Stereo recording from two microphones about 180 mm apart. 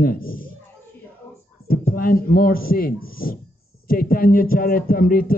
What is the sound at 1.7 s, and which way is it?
Speech, 55° left (ahead or behind).